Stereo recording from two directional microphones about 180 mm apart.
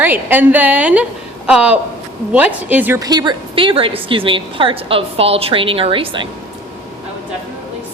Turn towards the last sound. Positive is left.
turn(degrees=-30)  # may be behind; listen again after turning